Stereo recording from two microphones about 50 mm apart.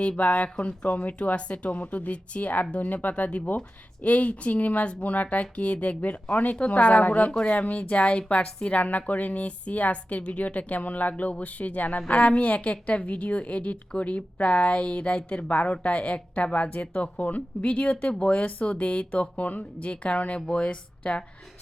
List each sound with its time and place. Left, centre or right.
0.2 s a woman's voice: left